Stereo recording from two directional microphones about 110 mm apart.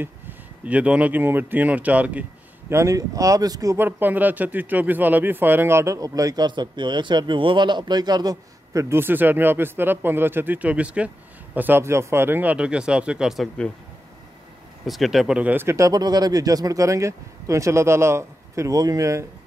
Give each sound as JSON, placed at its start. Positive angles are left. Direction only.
{"t": 0.0, "sound": "speech", "side_deg": -15}
{"t": 2.7, "sound": "speech", "side_deg": -30}
{"t": 3.7, "sound": "speech", "side_deg": -20}
{"t": 14.9, "sound": "speech", "side_deg": 0}